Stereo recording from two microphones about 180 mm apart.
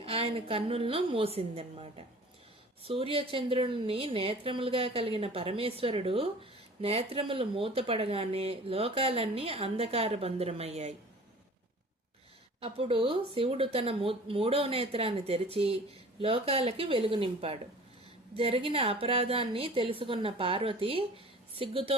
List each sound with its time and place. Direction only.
0.0 s a woman's voice: 30° right (ahead or behind)
12.5 s a woman's voice: 30° right (ahead or behind)